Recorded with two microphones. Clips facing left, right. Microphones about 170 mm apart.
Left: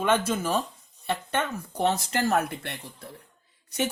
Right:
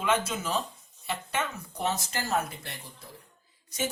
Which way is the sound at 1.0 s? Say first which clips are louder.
Left 4 dB; 60° left (ahead or behind).